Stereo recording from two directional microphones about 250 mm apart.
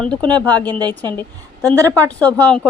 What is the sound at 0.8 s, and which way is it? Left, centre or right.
Speech, centre.